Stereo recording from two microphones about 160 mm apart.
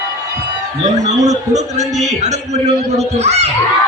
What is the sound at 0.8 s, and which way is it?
A man's voice, 50° right (ahead or behind).